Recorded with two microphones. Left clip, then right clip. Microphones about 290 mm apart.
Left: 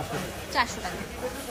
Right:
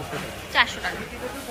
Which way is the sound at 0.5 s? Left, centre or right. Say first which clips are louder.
Right 6 dB; centre.